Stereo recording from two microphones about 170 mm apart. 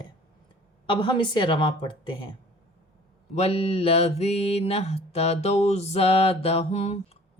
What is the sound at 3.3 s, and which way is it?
Mantra, 35° left (ahead or behind).